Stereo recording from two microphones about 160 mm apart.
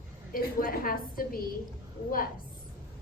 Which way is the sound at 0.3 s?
65° left (ahead or behind).